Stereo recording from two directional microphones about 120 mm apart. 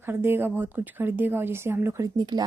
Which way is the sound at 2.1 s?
35° right (ahead or behind).